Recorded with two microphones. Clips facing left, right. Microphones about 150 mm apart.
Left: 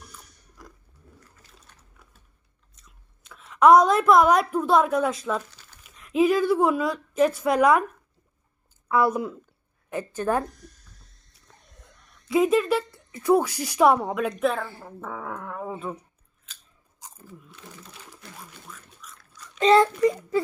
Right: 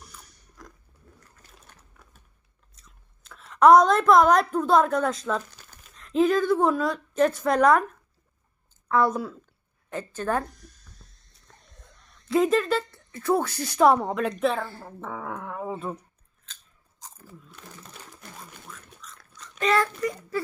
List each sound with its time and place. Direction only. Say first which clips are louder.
0.6 s a sound: even; 10° left (ahead or behind)
2.7 s a woman's voice: even; centre (ahead or behind)
8.9 s speech: left 1 dB; 10° left (ahead or behind)
11.8 s speech: left 1 dB; 5° left (ahead or behind)
17.0 s a sound: left 2 dB; 15° left (ahead or behind)
18.7 s duck: even; 5° left (ahead or behind)
19.5 s speech: left 6 dB; 25° left (ahead or behind)